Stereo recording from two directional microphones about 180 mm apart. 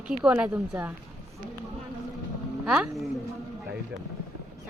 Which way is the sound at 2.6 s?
Centre (ahead or behind).